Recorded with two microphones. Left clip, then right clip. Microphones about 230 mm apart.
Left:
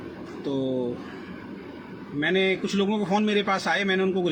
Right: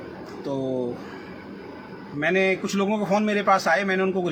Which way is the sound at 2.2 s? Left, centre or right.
Right.